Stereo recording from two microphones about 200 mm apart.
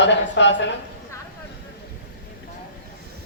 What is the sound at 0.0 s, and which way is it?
Speech, 65° left (ahead or behind).